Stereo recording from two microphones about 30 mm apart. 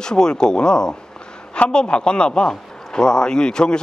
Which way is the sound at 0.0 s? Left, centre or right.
Left.